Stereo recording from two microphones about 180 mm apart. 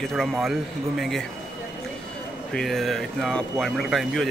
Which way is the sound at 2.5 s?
Centre (ahead or behind).